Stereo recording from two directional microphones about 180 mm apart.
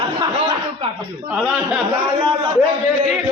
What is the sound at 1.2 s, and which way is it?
Speech, 5° right (ahead or behind).